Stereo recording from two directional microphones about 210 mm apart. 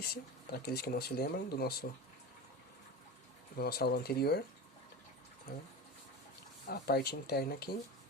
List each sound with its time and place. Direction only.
0.1 s speech: 50° left (ahead or behind)
3.6 s speech: 50° left (ahead or behind)
5.5 s speech: 45° left (ahead or behind)
6.7 s speech: 45° left (ahead or behind)